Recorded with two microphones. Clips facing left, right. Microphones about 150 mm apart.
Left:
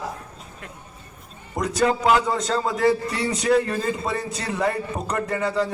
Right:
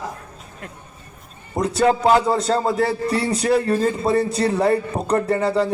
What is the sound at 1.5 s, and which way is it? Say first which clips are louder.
A man's voice: right 4 dB; 30° right (ahead or behind).